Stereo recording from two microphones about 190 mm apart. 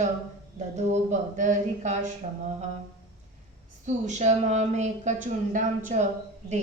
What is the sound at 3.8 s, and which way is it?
A woman's voice, 40° right (ahead or behind).